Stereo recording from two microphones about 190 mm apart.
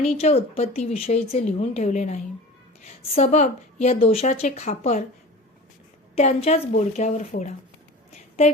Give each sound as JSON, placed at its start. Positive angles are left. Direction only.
{"t": 0.0, "sound": "a woman's voice", "side_deg": 35}
{"t": 6.1, "sound": "a woman's voice", "side_deg": 35}